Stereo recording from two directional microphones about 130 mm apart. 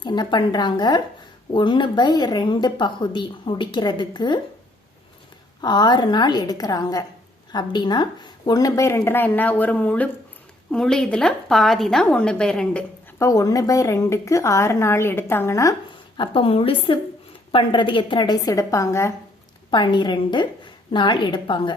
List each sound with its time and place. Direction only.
0.0 s speech: 35° left (ahead or behind)
5.6 s a woman's voice: 35° left (ahead or behind); by 12.8 s 5° left (ahead or behind)
13.1 s a woman's voice: 25° left (ahead or behind)
16.1 s a woman's voice: 40° left (ahead or behind); by 19.1 s 20° left (ahead or behind)
19.7 s speech: 35° left (ahead or behind)